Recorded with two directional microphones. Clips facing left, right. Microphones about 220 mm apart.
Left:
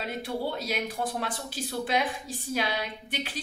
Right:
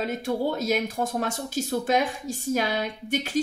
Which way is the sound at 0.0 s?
45° right (ahead or behind).